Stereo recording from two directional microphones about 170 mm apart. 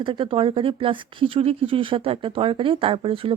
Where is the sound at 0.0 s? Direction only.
30° right (ahead or behind).